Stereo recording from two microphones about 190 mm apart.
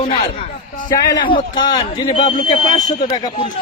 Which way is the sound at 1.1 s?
25° left (ahead or behind).